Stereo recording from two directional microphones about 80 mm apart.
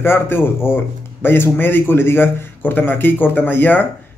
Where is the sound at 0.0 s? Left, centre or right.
Left.